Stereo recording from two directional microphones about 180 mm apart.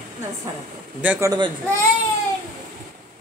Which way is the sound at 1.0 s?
10° right (ahead or behind).